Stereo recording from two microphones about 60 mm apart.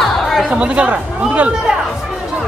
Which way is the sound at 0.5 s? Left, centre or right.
Centre.